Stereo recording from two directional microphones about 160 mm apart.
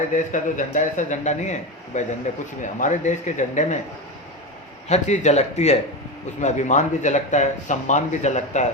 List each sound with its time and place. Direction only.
0.3 s speech: 50° left (ahead or behind)
4.9 s speech: 45° left (ahead or behind)